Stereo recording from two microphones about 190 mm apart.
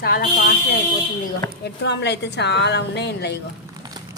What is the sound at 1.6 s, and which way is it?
A woman's voice, 65° left (ahead or behind).